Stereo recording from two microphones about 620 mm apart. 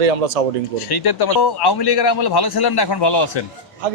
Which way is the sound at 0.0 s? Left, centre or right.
Right.